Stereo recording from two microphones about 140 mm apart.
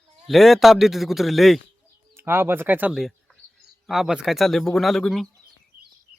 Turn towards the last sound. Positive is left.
turn(degrees=0)  # may be behind; listen again after turning